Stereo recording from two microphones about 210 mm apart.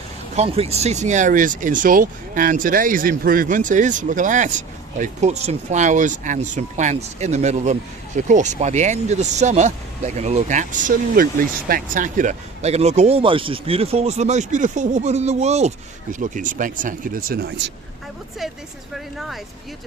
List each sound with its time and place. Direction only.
0.3 s speech: 30° right (ahead or behind); by 17.7 s 45° right (ahead or behind)
18.9 s speech: centre (ahead or behind)